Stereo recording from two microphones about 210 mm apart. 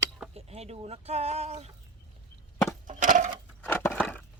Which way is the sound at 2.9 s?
35° right (ahead or behind).